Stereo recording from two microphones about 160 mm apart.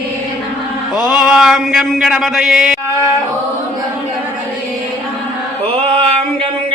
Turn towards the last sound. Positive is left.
turn(degrees=-35)  # may be behind; listen again after turning